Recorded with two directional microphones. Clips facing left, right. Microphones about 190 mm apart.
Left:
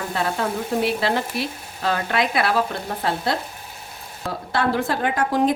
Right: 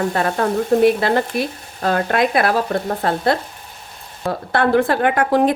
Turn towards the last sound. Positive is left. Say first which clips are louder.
# right 4 dB
turn(degrees=-60)  # may be behind; listen again after turning